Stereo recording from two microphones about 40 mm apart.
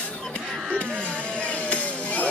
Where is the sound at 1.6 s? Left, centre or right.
Left.